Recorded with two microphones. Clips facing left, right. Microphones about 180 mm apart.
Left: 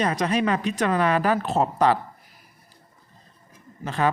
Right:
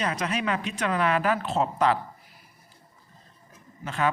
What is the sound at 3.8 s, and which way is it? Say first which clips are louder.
Speech: left 3 dB; 35° left (ahead or behind).